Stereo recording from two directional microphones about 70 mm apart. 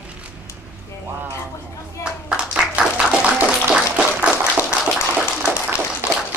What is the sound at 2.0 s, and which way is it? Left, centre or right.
Clapping, centre.